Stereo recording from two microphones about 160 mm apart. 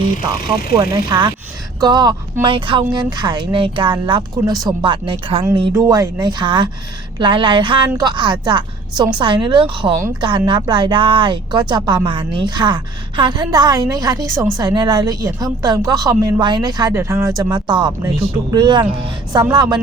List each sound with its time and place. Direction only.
0.8 s a woman's voice: 25° right (ahead or behind)
5.7 s a woman's voice: 20° right (ahead or behind)